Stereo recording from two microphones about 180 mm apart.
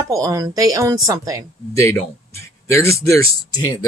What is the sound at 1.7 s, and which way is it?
Speech, 15° left (ahead or behind).